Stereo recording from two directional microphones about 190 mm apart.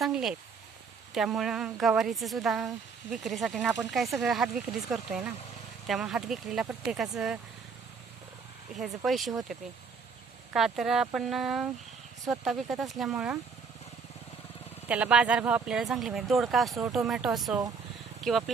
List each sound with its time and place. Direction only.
0.0 s speech: centre (ahead or behind)
9.0 s speech: centre (ahead or behind)
10.5 s speech: centre (ahead or behind)
14.8 s speech: 5° right (ahead or behind)